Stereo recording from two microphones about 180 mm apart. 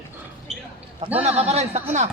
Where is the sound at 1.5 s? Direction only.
35° right (ahead or behind).